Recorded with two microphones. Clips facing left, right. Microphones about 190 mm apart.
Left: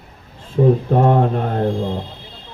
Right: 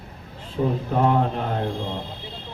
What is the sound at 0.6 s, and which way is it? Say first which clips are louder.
Speech: left 9 dB; 45° left (ahead or behind).